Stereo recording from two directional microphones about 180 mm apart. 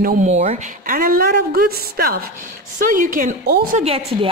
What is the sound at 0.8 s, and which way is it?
A woman's voice, 55° right (ahead or behind).